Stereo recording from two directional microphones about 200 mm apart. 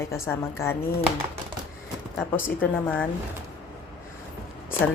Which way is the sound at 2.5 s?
10° left (ahead or behind).